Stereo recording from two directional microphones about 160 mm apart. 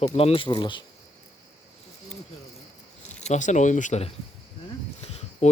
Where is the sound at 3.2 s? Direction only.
50° left (ahead or behind).